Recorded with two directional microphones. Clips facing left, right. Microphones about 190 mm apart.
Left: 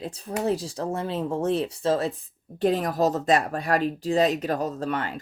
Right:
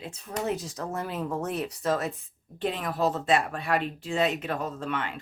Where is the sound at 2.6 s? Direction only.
40° left (ahead or behind).